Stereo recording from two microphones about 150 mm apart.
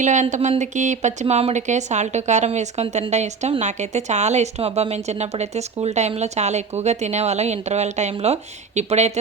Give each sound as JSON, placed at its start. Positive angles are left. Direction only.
{"t": 0.0, "sound": "speech", "side_deg": -55}